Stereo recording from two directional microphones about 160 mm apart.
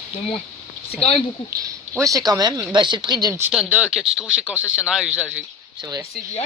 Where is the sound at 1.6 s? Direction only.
20° right (ahead or behind).